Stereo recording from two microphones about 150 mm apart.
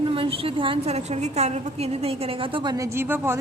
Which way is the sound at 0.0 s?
35° right (ahead or behind).